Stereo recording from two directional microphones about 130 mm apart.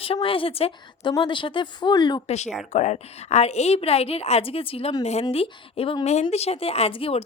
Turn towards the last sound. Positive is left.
turn(degrees=50)  # may be behind; listen again after turning